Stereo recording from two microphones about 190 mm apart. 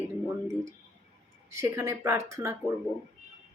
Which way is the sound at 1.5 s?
10° right (ahead or behind).